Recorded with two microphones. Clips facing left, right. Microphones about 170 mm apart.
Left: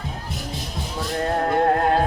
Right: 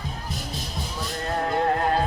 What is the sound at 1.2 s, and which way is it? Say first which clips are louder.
Music: left 4 dB; 50° left (ahead or behind).